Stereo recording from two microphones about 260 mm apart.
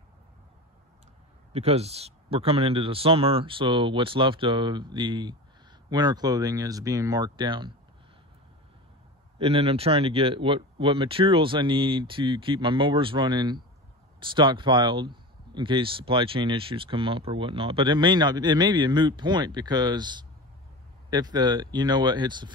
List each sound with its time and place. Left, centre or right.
1.5 s speech: right
9.4 s speech: right